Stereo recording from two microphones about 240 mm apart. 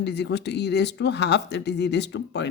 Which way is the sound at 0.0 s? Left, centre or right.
Left.